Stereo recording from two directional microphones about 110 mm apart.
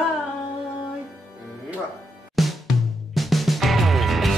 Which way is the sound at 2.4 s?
Centre (ahead or behind).